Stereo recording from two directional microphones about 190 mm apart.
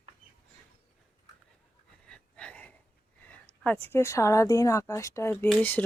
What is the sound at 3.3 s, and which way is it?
A woman's voice, 10° left (ahead or behind).